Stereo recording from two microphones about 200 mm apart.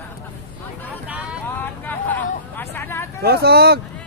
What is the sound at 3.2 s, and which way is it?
Speech, 55° right (ahead or behind).